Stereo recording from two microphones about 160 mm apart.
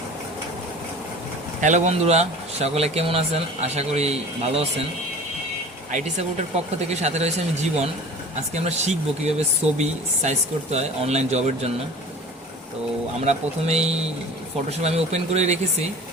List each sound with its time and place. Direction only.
1.6 s speech: 45° right (ahead or behind)
5.9 s speech: 45° right (ahead or behind)
13.2 s speech: 45° right (ahead or behind)